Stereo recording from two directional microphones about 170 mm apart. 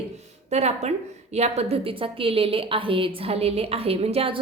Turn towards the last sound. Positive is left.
turn(degrees=-35)  # may be behind; listen again after turning